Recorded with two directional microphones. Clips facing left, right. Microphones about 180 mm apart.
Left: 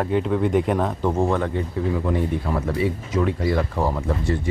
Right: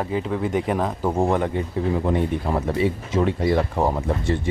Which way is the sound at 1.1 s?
20° right (ahead or behind).